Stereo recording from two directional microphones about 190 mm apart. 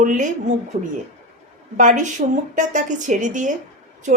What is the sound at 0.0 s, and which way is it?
A woman's voice, 45° right (ahead or behind).